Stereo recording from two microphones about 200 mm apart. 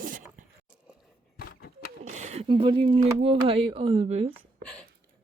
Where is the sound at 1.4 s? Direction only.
50° left (ahead or behind).